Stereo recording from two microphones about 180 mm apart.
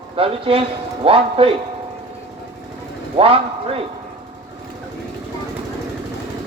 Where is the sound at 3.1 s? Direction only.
30° right (ahead or behind).